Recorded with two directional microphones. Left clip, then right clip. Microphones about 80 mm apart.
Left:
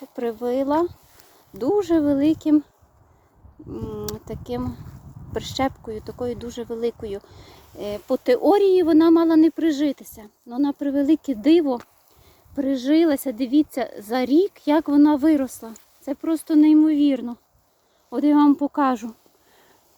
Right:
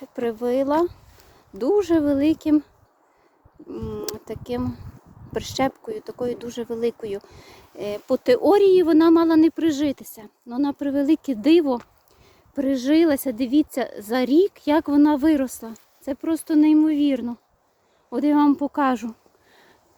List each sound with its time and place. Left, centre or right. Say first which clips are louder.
0.0 s speech: right 1 dB; right
3.7 s speech: even; right